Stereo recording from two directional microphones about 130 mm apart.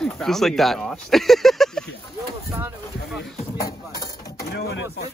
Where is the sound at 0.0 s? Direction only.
Centre (ahead or behind).